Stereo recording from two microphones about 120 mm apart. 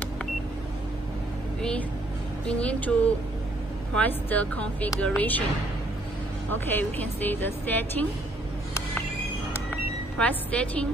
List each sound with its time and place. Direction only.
1.6 s speech: 10° left (ahead or behind)
6.5 s speech: 15° left (ahead or behind)
10.1 s speech: 10° left (ahead or behind)